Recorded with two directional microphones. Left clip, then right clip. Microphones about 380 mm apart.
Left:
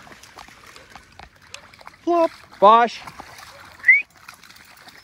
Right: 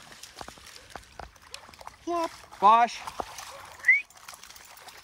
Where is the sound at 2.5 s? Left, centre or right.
Centre.